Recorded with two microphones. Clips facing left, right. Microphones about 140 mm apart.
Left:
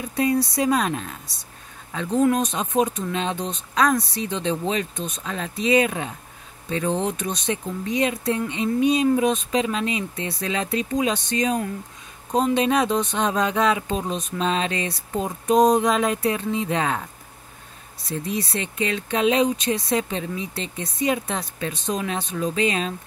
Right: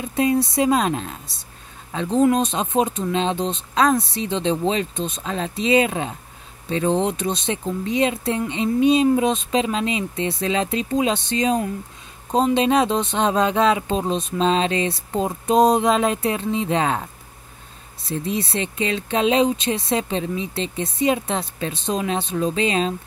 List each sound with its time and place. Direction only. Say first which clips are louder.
0.1 s speech: right 2 dB; 25° right (ahead or behind)
18.0 s speech: right 2 dB; 25° right (ahead or behind)